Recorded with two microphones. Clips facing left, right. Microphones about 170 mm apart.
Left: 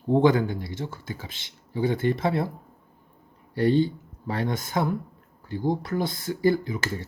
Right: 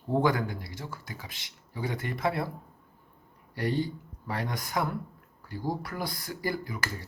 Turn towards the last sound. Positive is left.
turn(degrees=25)  # may be behind; listen again after turning